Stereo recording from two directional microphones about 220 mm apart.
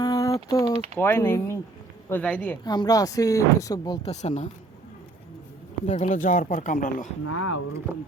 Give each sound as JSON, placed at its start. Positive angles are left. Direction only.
{"t": 0.0, "sound": "typing", "side_deg": 15}
{"t": 0.9, "sound": "speech", "side_deg": 10}
{"t": 2.6, "sound": "speech", "side_deg": 20}
{"t": 4.1, "sound": "speech", "side_deg": 30}
{"t": 5.8, "sound": "speech", "side_deg": 30}
{"t": 7.3, "sound": "speech", "side_deg": 90}
{"t": 7.9, "sound": "speech", "side_deg": -10}